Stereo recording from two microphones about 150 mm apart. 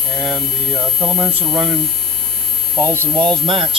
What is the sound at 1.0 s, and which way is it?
Speech, 5° right (ahead or behind).